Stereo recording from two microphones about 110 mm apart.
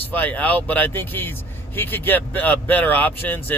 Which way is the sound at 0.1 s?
15° left (ahead or behind).